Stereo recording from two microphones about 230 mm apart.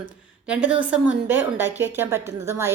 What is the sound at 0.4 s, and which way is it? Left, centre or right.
A woman's voice, centre.